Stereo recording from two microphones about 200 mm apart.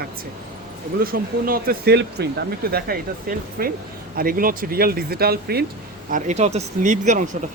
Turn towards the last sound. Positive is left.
turn(degrees=-35)  # may be behind; listen again after turning